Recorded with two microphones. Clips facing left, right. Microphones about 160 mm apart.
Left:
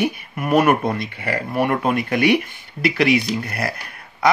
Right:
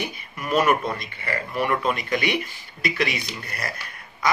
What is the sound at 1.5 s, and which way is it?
Speech, 50° left (ahead or behind).